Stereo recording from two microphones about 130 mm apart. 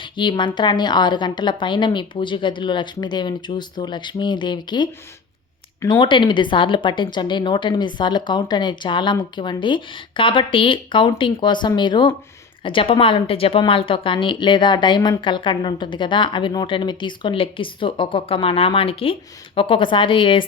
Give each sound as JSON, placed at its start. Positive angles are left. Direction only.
{"t": 0.0, "sound": "speech", "side_deg": 40}
{"t": 5.9, "sound": "speech", "side_deg": 40}